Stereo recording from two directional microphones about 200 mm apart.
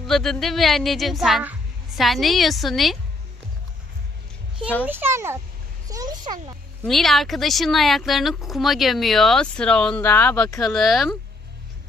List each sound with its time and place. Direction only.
0.0 s speech: centre (ahead or behind)
4.8 s a child's voice: 10° right (ahead or behind)
6.8 s speech: centre (ahead or behind)
10.6 s speech: centre (ahead or behind)